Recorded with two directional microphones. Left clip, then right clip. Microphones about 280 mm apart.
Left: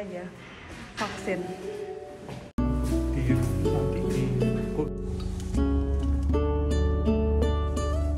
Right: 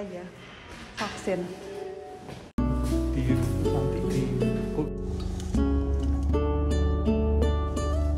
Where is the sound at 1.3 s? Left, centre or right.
Centre.